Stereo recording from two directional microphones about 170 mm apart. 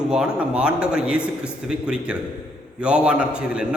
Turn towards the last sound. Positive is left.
turn(degrees=-5)  # may be behind; listen again after turning